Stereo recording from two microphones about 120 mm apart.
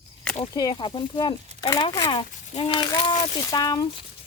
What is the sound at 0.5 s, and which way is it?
Speech, 35° left (ahead or behind).